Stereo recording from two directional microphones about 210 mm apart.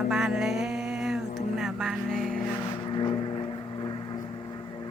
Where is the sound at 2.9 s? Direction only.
20° left (ahead or behind).